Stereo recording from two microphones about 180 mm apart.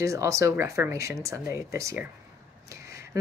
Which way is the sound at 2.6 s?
15° right (ahead or behind).